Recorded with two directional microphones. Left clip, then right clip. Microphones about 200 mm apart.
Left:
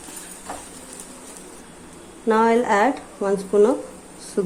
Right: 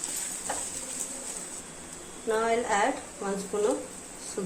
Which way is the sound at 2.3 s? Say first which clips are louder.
Left 9 dB; 60° left (ahead or behind).